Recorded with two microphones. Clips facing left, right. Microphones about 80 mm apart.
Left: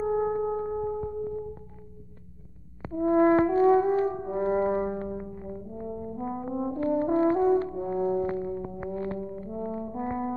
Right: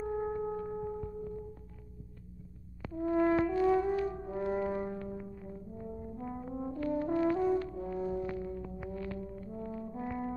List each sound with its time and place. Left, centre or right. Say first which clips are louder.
0.0 s music: left 8 dB; left
2.8 s french horn: left 8 dB; left